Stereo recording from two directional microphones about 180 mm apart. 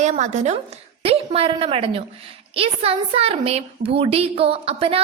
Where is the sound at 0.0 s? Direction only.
40° right (ahead or behind).